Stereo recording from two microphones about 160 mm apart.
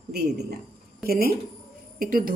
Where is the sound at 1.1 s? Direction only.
70° right (ahead or behind).